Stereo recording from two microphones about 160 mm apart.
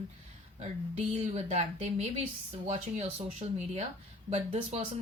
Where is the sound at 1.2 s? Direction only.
45° right (ahead or behind).